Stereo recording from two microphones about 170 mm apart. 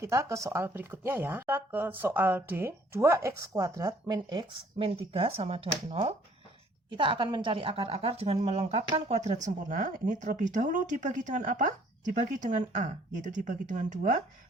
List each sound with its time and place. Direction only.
0.0 s speech: 15° right (ahead or behind)
9.0 s speech: 40° right (ahead or behind)